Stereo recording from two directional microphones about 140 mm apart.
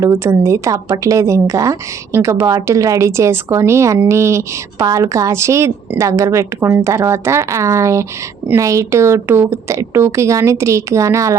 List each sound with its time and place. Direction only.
0.0 s speech: 20° right (ahead or behind)